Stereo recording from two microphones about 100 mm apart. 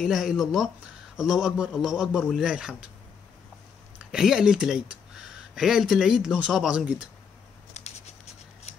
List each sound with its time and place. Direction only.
0.0 s speech: 5° right (ahead or behind)
4.1 s speech: 5° right (ahead or behind)
7.8 s a sound: 90° left